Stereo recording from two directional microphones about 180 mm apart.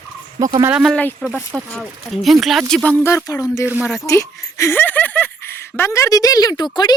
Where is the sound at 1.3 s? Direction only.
15° right (ahead or behind).